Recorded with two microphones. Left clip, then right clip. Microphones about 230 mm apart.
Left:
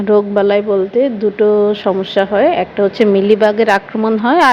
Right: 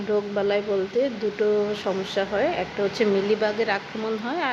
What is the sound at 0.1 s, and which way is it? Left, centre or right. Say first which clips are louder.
Speech: left 12 dB; left.